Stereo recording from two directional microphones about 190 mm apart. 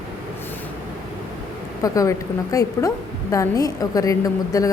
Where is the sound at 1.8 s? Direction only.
15° left (ahead or behind).